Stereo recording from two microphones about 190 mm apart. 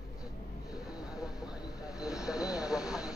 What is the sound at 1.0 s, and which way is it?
Vehicle, 5° right (ahead or behind).